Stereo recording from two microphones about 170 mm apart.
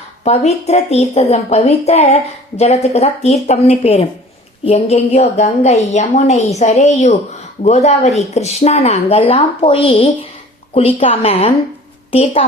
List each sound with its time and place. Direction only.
0.3 s a woman's voice: 40° left (ahead or behind)